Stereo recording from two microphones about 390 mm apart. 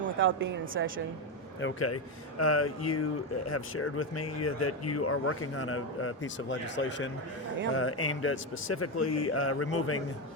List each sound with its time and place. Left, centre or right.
0.2 s a woman's voice: right
1.6 s speech: left